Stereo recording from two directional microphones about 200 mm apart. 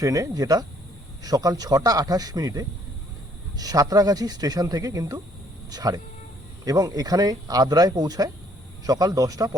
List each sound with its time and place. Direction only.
0.0 s a man's voice: 15° right (ahead or behind)